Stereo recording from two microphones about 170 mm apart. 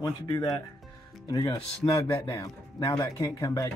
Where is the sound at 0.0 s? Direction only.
25° left (ahead or behind).